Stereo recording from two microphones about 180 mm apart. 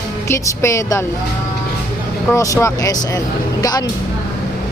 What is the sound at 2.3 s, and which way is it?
A woman's voice, 15° left (ahead or behind).